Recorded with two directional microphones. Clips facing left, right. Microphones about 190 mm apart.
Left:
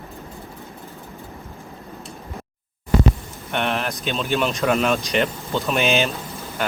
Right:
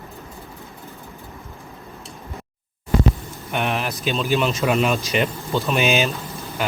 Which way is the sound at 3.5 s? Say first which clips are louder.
Even; centre (ahead or behind).